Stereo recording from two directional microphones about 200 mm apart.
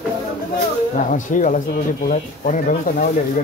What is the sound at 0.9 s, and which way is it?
Speech, 40° left (ahead or behind).